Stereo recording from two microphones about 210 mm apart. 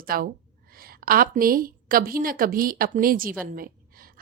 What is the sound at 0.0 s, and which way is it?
A woman's voice, 45° right (ahead or behind).